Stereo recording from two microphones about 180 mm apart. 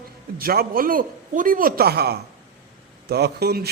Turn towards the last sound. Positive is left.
turn(degrees=-60)  # may be behind; listen again after turning